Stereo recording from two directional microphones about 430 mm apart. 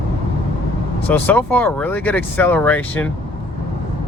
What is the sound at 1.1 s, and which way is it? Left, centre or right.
Speech, centre.